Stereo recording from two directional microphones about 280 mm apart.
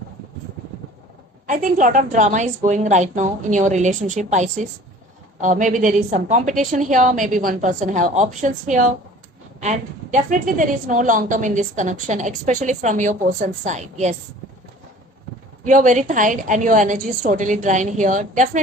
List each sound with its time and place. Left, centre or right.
1.5 s a woman's voice: right
15.6 s a woman's voice: right